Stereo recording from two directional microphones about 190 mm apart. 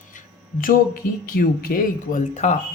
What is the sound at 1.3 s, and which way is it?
Speech, 50° left (ahead or behind).